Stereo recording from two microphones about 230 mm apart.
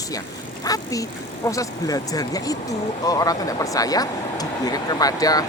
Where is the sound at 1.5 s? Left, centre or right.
Centre.